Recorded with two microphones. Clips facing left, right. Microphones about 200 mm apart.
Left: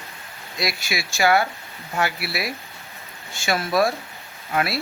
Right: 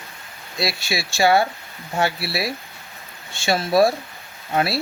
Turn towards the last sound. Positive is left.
turn(degrees=-30)  # may be behind; listen again after turning